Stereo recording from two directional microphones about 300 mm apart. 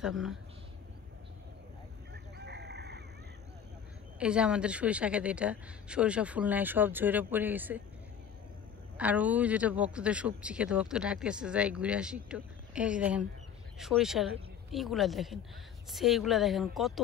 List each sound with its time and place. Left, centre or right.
0.0 s a man's voice: centre
2.3 s chicken: right
4.2 s a man's voice: centre
8.9 s a man's voice: centre